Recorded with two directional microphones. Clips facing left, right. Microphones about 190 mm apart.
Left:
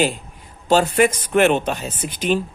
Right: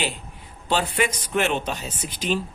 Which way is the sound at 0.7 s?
45° left (ahead or behind).